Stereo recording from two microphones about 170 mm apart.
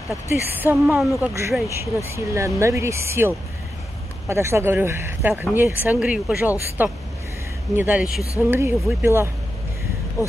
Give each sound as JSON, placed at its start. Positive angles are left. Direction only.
{"t": 0.3, "sound": "speech", "side_deg": -10}